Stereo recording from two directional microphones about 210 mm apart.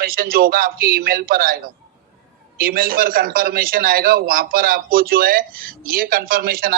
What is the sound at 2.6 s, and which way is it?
A man's voice, 45° right (ahead or behind).